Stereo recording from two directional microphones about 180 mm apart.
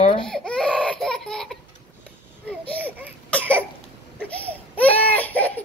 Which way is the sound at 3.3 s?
10° left (ahead or behind).